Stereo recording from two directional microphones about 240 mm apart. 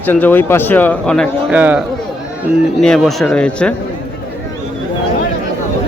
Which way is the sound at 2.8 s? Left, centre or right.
Centre.